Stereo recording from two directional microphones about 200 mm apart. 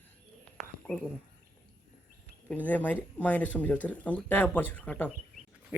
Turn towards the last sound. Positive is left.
turn(degrees=10)  # may be behind; listen again after turning